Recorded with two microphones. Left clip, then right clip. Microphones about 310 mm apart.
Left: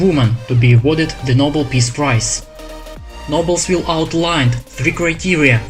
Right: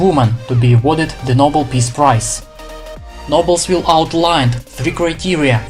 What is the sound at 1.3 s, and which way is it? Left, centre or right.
Speech, right.